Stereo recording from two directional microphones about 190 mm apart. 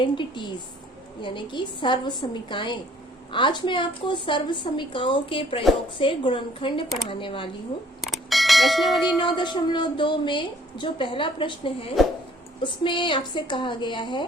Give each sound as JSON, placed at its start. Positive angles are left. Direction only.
{"t": 0.0, "sound": "a woman's voice", "side_deg": 25}
{"t": 8.0, "sound": "a sound", "side_deg": 0}
{"t": 9.1, "sound": "a woman's voice", "side_deg": 25}